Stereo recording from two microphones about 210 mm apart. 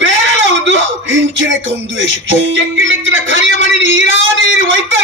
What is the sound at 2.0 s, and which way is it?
Music, 60° right (ahead or behind).